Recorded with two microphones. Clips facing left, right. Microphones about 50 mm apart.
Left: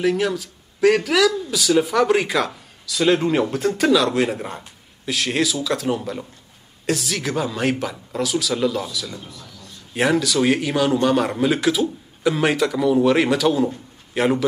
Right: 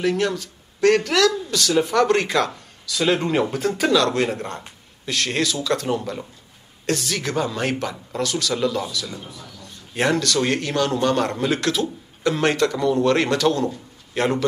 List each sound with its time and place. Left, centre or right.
0.0 s speech: centre
9.2 s speech: centre
9.9 s speech: centre